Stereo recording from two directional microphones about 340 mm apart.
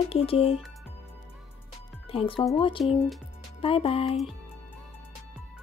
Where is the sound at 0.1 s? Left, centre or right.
Centre.